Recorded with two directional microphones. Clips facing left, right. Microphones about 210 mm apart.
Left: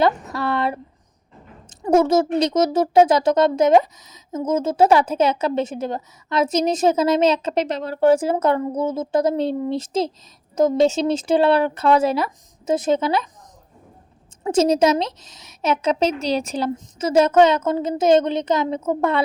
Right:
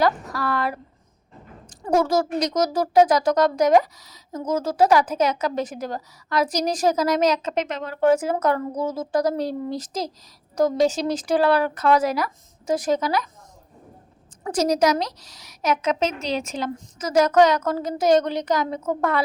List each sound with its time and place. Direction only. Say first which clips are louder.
0.0 s speech: left 2 dB; 25° left (ahead or behind)
14.4 s speech: left 4 dB; 25° left (ahead or behind)